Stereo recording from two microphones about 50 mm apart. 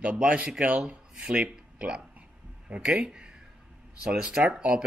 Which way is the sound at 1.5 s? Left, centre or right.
Right.